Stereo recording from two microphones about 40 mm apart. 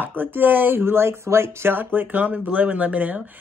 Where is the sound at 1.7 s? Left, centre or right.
Right.